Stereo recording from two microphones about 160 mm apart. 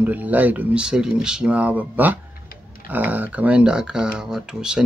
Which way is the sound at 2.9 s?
10° right (ahead or behind).